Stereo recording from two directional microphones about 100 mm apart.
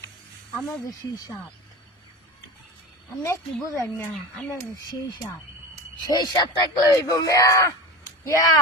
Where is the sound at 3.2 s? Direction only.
30° left (ahead or behind).